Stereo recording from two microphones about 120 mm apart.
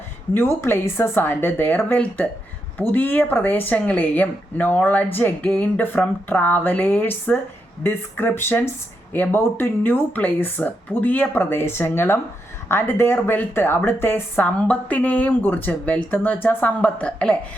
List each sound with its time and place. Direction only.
0.3 s speech: 20° left (ahead or behind)